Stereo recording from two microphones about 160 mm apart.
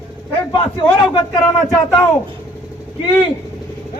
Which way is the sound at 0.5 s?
30° left (ahead or behind).